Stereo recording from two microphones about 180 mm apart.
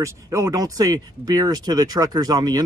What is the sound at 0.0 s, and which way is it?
Speech, 15° right (ahead or behind).